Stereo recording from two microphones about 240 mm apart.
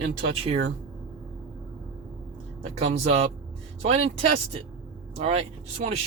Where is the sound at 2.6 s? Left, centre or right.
Right.